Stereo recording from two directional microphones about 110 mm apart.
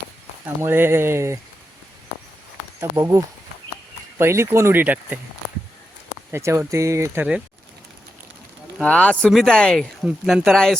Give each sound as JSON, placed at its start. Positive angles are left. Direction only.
{"t": 0.6, "sound": "speech", "side_deg": -20}
{"t": 2.9, "sound": "speech", "side_deg": -35}
{"t": 4.2, "sound": "speech", "side_deg": -25}
{"t": 6.3, "sound": "speech", "side_deg": -25}
{"t": 8.8, "sound": "speech", "side_deg": 10}